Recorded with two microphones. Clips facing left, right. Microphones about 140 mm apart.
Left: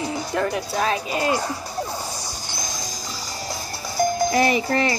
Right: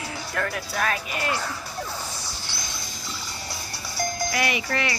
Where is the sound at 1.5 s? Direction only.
35° left (ahead or behind).